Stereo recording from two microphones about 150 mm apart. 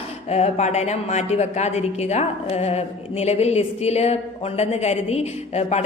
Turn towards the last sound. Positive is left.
turn(degrees=45)  # may be behind; listen again after turning